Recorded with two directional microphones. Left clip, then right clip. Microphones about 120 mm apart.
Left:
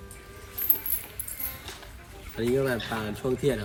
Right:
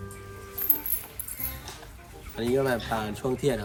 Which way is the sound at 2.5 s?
35° right (ahead or behind).